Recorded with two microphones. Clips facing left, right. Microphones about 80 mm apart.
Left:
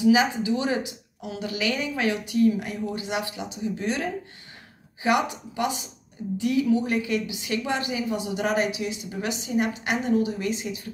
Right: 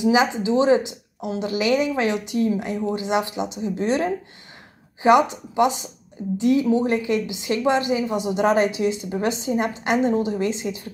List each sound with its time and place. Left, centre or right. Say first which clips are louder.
0.0 s a woman's voice: right 1 dB; right